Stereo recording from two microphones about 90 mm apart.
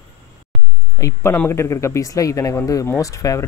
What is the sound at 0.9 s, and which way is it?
Speech, 30° left (ahead or behind).